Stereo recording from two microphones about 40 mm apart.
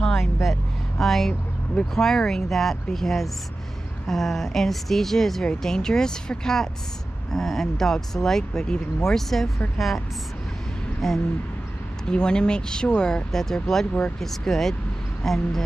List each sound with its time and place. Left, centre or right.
0.2 s speech: centre
12.1 s speech: left